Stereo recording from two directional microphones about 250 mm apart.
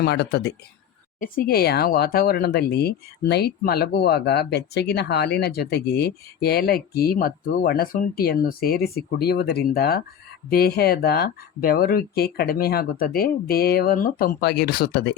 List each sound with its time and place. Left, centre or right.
0.0 s speech: left